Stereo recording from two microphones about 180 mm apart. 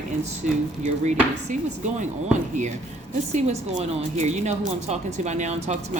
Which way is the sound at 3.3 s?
40° right (ahead or behind).